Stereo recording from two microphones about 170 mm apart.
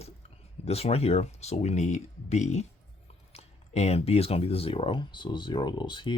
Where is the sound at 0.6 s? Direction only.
40° left (ahead or behind).